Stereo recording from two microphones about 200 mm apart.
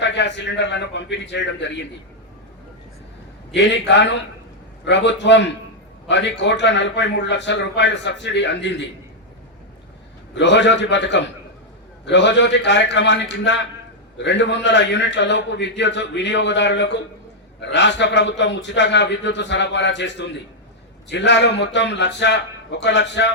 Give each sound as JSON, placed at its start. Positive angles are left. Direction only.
{"t": 0.0, "sound": "a man's voice", "side_deg": 60}
{"t": 3.5, "sound": "a man's voice", "side_deg": 60}
{"t": 10.3, "sound": "a man's voice", "side_deg": 60}